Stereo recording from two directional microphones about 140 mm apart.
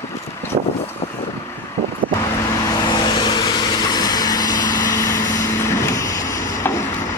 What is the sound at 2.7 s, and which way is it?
Vehicle, 35° left (ahead or behind).